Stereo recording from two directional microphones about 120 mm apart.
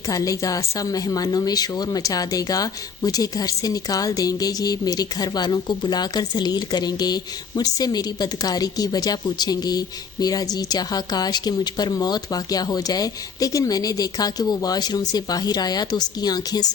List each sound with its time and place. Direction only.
0.1 s speech: 30° left (ahead or behind)